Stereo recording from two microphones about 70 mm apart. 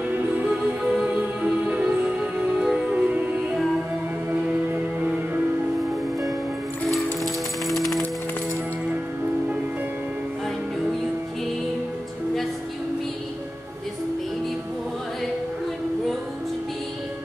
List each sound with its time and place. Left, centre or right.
0.9 s music: centre
7.6 s music: centre